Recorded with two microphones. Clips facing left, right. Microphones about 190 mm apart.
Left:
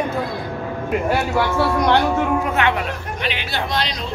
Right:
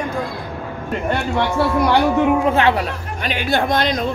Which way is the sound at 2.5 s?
35° right (ahead or behind).